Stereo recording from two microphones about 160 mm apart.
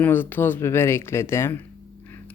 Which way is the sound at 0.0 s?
10° left (ahead or behind).